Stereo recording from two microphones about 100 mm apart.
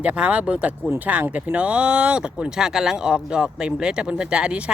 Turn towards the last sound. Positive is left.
turn(degrees=-10)  # may be behind; listen again after turning